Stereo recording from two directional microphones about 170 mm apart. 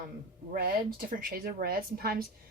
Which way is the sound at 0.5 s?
60° right (ahead or behind).